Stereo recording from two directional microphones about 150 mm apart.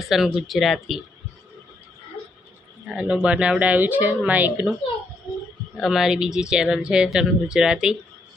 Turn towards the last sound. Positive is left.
turn(degrees=-5)  # may be behind; listen again after turning